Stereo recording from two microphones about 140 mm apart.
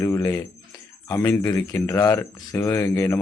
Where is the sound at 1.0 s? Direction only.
20° left (ahead or behind).